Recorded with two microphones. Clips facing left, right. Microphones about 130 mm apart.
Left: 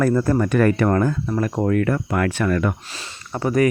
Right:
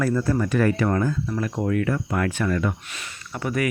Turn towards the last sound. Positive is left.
turn(degrees=40)  # may be behind; listen again after turning